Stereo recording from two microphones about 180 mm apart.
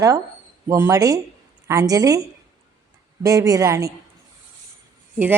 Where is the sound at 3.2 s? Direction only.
20° right (ahead or behind).